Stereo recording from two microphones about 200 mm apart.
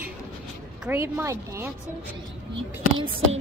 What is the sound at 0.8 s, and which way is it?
Speech, 10° right (ahead or behind).